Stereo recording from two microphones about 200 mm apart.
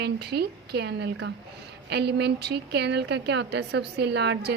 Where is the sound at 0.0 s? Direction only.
55° right (ahead or behind).